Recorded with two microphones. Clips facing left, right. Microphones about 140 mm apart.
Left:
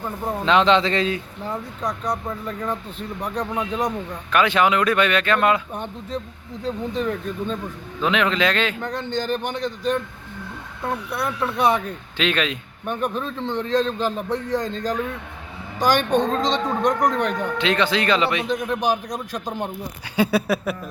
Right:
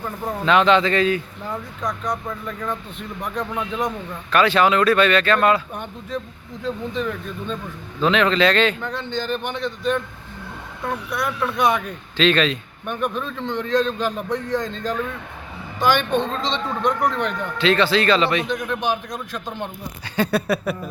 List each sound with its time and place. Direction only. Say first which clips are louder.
0.0 s a man's voice: even; 20° left (ahead or behind)
3.8 s speech: left 1 dB; 15° left (ahead or behind)
5.7 s a man's voice: even; 30° left (ahead or behind)
8.0 s speech: right 3 dB; 15° left (ahead or behind)
8.8 s a man's voice: left 1 dB; 45° left (ahead or behind)
12.1 s speech: right 5 dB; 10° left (ahead or behind)
12.8 s a man's voice: left 1 dB; 35° left (ahead or behind)
17.6 s a man's voice: right 5 dB; 15° left (ahead or behind)
18.8 s a man's voice: left 2 dB; 40° left (ahead or behind)
19.6 s speech: left 2 dB; 10° left (ahead or behind)